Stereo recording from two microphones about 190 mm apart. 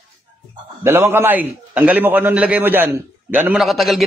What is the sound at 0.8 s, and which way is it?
A man's voice, 15° right (ahead or behind).